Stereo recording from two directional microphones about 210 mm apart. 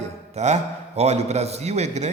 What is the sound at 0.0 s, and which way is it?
A man's voice, 30° right (ahead or behind).